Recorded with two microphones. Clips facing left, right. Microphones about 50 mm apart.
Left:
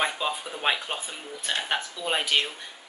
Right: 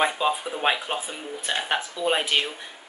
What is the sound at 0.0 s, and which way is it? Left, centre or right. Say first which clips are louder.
Speech: right 5 dB; centre.